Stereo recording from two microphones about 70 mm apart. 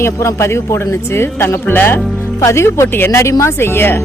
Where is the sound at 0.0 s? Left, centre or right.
Left.